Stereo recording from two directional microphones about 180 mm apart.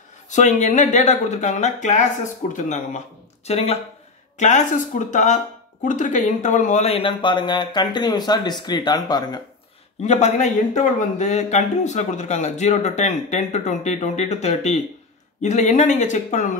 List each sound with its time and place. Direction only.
0.3 s a man's voice: 40° left (ahead or behind); by 9.4 s 20° left (ahead or behind)
10.0 s speech: 40° left (ahead or behind)